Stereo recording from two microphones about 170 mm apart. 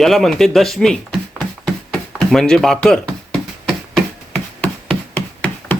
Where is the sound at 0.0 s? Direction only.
Centre (ahead or behind).